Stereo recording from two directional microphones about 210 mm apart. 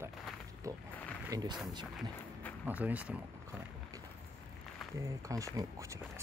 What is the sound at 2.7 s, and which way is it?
Speech, 5° right (ahead or behind).